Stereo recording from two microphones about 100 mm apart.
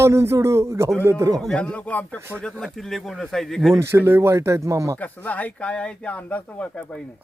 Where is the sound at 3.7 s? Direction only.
25° right (ahead or behind).